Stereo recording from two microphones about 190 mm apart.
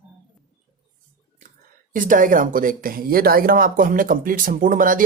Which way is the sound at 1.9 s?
45° right (ahead or behind).